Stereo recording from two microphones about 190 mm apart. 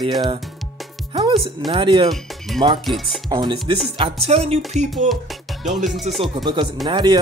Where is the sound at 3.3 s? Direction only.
20° right (ahead or behind).